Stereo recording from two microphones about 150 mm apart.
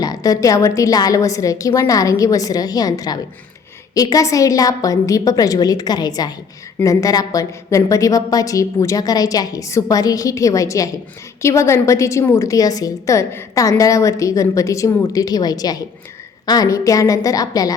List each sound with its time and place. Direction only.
0.0 s a woman's voice: 25° left (ahead or behind)